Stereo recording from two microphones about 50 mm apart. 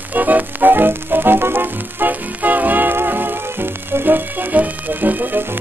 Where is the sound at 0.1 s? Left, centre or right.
Right.